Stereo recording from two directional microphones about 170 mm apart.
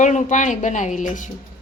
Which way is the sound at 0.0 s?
45° left (ahead or behind).